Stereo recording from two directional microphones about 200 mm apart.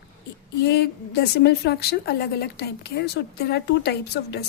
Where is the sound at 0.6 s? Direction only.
55° left (ahead or behind).